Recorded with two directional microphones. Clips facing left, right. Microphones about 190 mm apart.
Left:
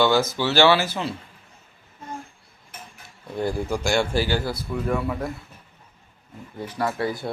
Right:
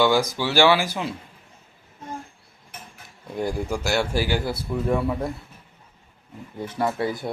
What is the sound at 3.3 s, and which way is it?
Speech, 10° right (ahead or behind).